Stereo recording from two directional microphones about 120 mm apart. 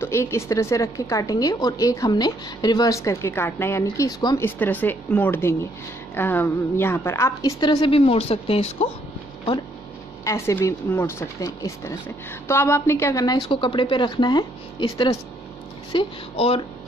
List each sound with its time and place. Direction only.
0.0 s a woman's voice: 20° left (ahead or behind)
3.9 s speech: 30° left (ahead or behind)
4.4 s a woman's voice: 15° left (ahead or behind)
7.6 s speech: 40° left (ahead or behind)
7.9 s speech: 55° left (ahead or behind)
10.2 s a woman's voice: 20° left (ahead or behind)
13.5 s speech: 45° left (ahead or behind)